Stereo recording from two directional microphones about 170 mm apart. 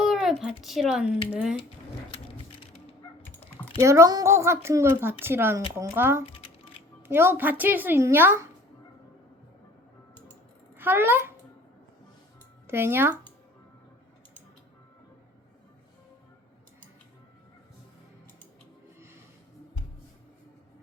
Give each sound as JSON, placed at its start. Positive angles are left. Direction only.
{"t": 0.0, "sound": "a sound", "side_deg": -5}
{"t": 0.6, "sound": "speech", "side_deg": 0}
{"t": 3.8, "sound": "a woman's voice", "side_deg": -20}
{"t": 10.8, "sound": "a child's voice", "side_deg": -10}
{"t": 12.6, "sound": "speech", "side_deg": -15}